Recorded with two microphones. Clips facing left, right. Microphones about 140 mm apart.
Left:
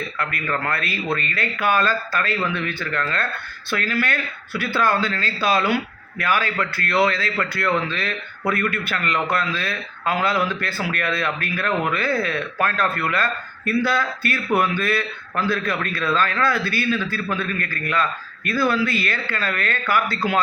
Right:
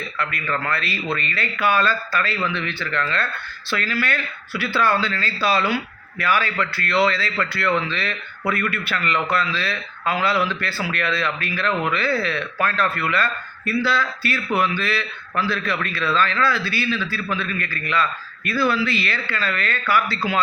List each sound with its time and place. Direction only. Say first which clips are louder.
0.2 s speech: right 1 dB; 50° left (ahead or behind)